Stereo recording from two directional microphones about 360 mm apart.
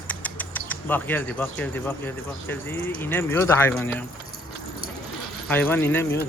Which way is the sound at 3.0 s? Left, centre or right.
Centre.